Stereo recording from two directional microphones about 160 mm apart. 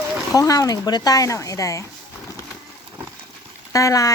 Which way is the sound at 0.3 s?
20° left (ahead or behind).